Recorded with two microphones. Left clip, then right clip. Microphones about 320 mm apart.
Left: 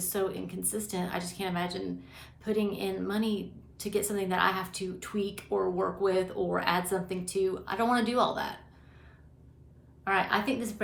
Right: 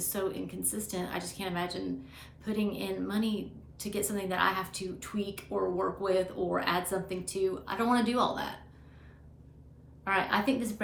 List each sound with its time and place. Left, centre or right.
0.0 s a woman's voice: centre
10.0 s a woman's voice: centre